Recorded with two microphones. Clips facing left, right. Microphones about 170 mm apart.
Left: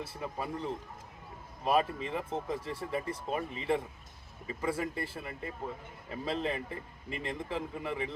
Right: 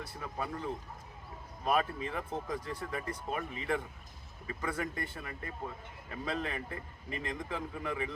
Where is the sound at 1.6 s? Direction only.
5° left (ahead or behind).